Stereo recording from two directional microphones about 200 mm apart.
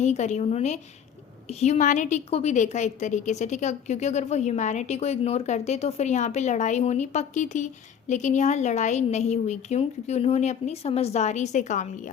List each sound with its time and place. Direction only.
0.0 s a woman's voice: 35° left (ahead or behind)